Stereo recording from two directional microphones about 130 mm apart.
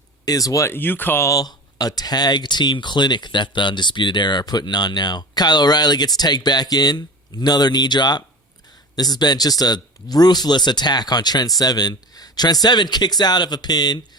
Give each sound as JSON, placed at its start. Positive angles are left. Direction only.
{"t": 0.3, "sound": "speech", "side_deg": 25}